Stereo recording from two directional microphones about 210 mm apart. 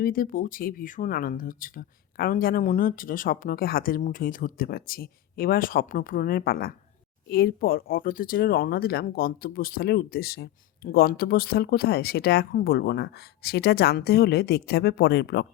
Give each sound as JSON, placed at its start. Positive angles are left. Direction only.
{"t": 0.0, "sound": "speech", "side_deg": 45}